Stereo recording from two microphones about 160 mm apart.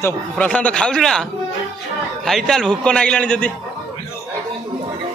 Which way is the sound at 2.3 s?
Centre (ahead or behind).